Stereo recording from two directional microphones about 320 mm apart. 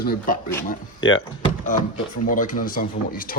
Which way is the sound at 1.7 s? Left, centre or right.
Left.